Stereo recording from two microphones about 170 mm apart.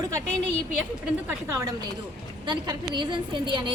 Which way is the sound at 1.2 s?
20° right (ahead or behind).